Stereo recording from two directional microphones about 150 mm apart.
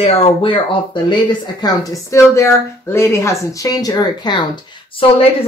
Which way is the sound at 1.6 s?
25° left (ahead or behind).